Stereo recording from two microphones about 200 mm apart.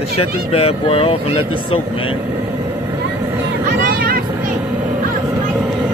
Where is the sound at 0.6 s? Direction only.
30° left (ahead or behind).